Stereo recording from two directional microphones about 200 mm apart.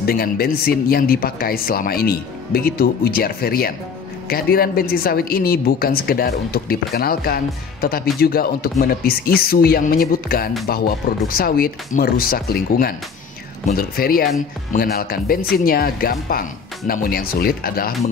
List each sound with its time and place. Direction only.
0.0 s a woman's voice: 50° left (ahead or behind)